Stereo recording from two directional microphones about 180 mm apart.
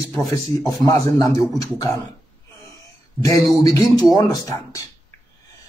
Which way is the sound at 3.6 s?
20° left (ahead or behind).